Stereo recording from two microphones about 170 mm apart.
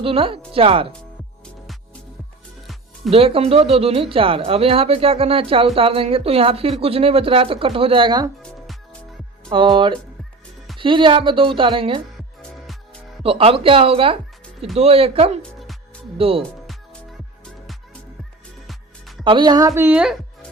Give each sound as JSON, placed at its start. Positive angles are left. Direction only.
{"t": 0.0, "sound": "speech", "side_deg": -35}
{"t": 3.1, "sound": "speech", "side_deg": -35}
{"t": 9.5, "sound": "speech", "side_deg": -30}
{"t": 13.2, "sound": "speech", "side_deg": -35}
{"t": 15.4, "sound": "music", "side_deg": 0}
{"t": 16.1, "sound": "speech", "side_deg": -35}
{"t": 18.7, "sound": "music", "side_deg": 0}
{"t": 19.2, "sound": "speech", "side_deg": -30}